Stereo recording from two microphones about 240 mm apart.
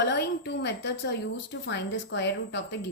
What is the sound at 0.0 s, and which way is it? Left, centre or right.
A woman's voice, left.